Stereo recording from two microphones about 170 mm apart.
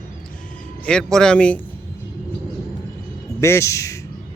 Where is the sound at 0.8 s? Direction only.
5° left (ahead or behind).